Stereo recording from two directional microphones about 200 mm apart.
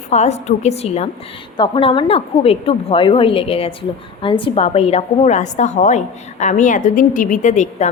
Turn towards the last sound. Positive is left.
turn(degrees=35)  # may be behind; listen again after turning